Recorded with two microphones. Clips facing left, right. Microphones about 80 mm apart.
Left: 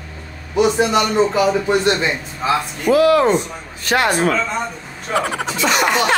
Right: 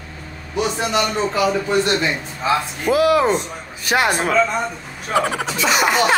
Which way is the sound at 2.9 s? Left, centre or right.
Centre.